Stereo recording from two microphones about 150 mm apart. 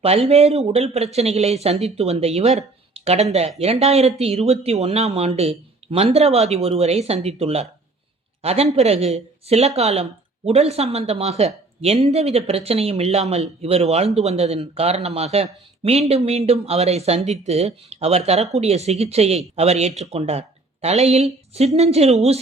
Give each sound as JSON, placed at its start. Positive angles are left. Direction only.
{"t": 0.3, "sound": "speech", "side_deg": -45}